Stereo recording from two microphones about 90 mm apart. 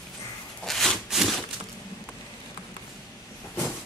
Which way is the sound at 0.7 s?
Centre (ahead or behind).